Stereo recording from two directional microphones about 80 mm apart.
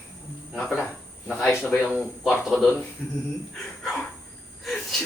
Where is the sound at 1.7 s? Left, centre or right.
Left.